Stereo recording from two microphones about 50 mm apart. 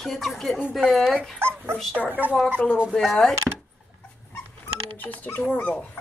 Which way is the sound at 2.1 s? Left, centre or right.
Right.